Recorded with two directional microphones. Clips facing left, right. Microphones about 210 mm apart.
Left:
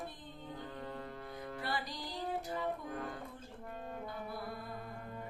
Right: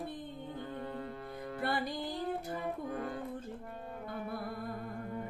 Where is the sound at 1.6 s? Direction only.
55° right (ahead or behind).